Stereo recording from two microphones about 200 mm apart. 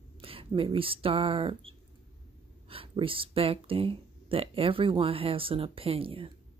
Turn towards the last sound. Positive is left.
turn(degrees=-25)  # may be behind; listen again after turning